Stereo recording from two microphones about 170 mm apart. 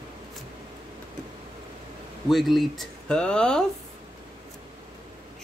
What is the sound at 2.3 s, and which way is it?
Speech, centre (ahead or behind).